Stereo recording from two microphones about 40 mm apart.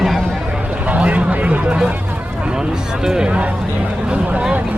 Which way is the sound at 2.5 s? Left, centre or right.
Centre.